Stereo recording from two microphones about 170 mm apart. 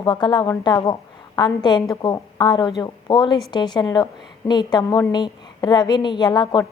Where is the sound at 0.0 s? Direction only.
25° left (ahead or behind).